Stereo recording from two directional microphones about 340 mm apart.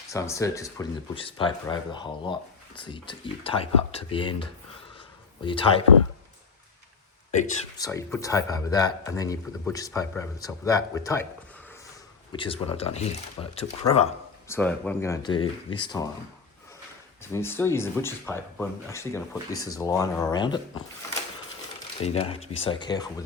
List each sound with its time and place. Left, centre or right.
0.1 s speech: centre
7.3 s speech: centre
12.3 s speech: centre
14.4 s speech: centre
17.3 s speech: centre
22.0 s speech: centre